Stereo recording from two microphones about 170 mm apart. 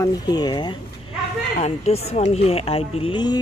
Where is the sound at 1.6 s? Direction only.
40° left (ahead or behind).